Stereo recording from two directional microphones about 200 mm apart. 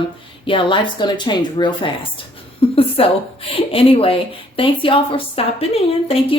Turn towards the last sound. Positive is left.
turn(degrees=30)  # may be behind; listen again after turning